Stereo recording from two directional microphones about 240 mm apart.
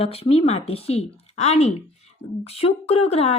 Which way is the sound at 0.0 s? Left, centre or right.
Left.